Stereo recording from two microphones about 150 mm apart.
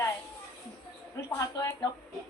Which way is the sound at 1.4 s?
20° left (ahead or behind).